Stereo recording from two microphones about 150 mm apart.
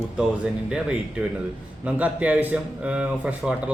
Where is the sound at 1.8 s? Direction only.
10° right (ahead or behind).